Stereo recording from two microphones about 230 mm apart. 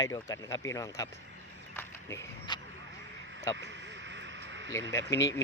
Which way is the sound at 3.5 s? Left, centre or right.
Right.